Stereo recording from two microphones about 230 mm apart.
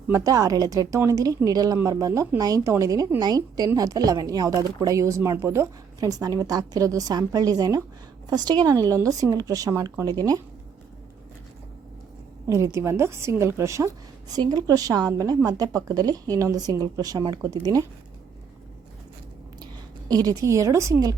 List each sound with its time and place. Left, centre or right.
0.1 s a woman's voice: centre
12.5 s a woman's voice: centre
20.1 s a woman's voice: centre